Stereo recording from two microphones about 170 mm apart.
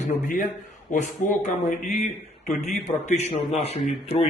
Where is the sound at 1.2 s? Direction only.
50° left (ahead or behind).